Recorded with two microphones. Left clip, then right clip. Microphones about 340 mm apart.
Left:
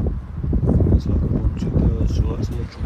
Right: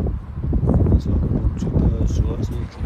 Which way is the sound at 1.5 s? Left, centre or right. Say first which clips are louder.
Even; centre.